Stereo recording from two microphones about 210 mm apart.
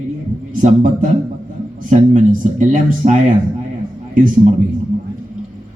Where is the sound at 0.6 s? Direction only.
35° right (ahead or behind).